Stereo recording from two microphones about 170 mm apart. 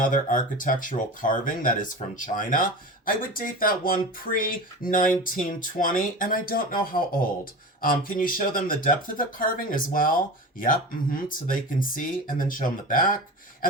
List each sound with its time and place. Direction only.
0.1 s speech: 50° left (ahead or behind)